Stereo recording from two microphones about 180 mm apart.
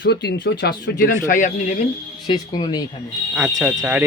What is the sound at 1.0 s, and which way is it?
Speech, 45° left (ahead or behind).